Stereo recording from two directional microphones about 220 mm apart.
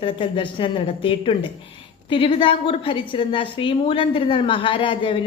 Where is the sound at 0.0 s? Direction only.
25° left (ahead or behind).